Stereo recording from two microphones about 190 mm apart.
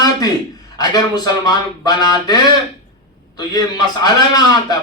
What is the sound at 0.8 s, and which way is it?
A man's voice, 20° left (ahead or behind).